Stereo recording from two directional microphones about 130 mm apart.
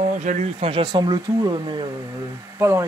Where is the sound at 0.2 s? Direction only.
65° right (ahead or behind).